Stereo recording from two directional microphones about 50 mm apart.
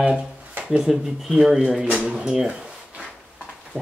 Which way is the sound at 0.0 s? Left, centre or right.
Right.